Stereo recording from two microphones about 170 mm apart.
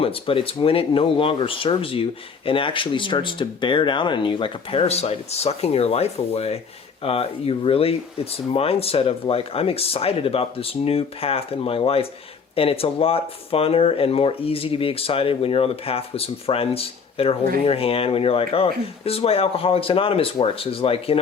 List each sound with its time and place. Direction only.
0.0 s speech: 30° left (ahead or behind)